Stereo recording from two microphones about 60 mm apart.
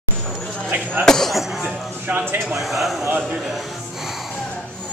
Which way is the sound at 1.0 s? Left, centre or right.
Centre.